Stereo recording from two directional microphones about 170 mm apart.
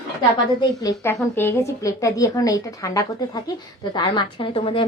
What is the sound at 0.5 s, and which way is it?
Speech, 20° left (ahead or behind).